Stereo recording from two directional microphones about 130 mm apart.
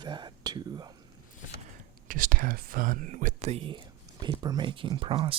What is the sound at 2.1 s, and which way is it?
Speech, 90° right.